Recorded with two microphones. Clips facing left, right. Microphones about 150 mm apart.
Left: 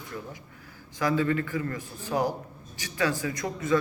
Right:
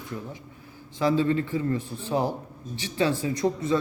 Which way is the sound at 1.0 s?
25° right (ahead or behind).